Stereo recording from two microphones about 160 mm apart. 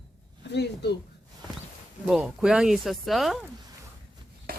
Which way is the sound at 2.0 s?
5° right (ahead or behind).